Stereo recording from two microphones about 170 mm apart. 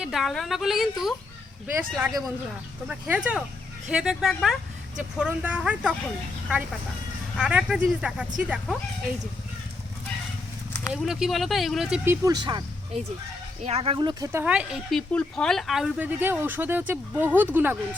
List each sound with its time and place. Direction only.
0.0 s speech: centre (ahead or behind)
1.6 s a woman's voice: 15° right (ahead or behind)
7.3 s a woman's voice: 5° right (ahead or behind)
10.9 s speech: centre (ahead or behind)
12.0 s speech: 20° right (ahead or behind)
13.7 s speech: 35° right (ahead or behind)
14.4 s a woman's voice: 5° right (ahead or behind)